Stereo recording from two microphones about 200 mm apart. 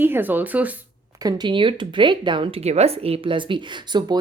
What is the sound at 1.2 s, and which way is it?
Speech, 20° right (ahead or behind).